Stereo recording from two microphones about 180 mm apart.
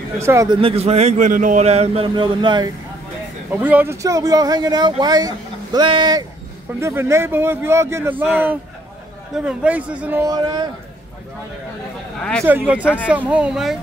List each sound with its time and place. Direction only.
0.2 s a man's voice: 15° right (ahead or behind)
0.6 s a man's voice: 35° right (ahead or behind)
3.5 s a man's voice: 10° right (ahead or behind)
9.3 s a man's voice: 5° right (ahead or behind)
10.2 s speech: 20° right (ahead or behind)
12.2 s speech: 5° left (ahead or behind)
12.4 s a man's voice: 10° right (ahead or behind)